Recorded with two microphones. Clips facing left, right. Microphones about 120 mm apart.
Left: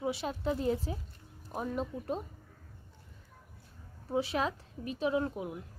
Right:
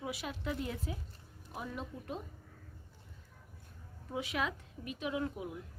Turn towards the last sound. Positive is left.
turn(degrees=35)  # may be behind; listen again after turning